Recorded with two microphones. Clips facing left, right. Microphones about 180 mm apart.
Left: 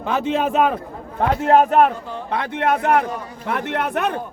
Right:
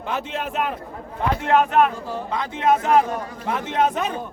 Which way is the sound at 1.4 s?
40° left (ahead or behind).